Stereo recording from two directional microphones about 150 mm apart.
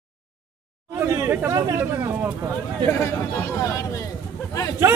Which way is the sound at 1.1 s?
15° right (ahead or behind).